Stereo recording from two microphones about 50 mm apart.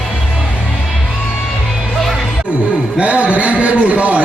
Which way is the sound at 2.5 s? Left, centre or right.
Right.